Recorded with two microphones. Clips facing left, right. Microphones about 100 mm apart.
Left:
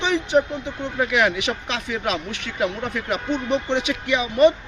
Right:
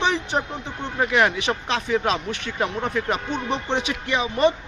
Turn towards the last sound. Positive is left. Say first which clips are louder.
# left 4 dB
turn(degrees=-35)  # may be behind; listen again after turning